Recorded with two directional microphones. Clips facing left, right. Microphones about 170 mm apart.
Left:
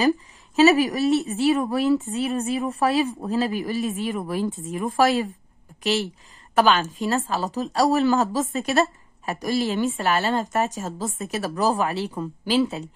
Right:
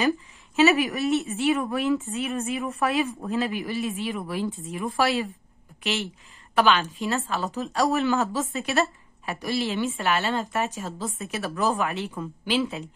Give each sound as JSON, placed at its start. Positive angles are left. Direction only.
{"t": 0.6, "sound": "speech", "side_deg": 40}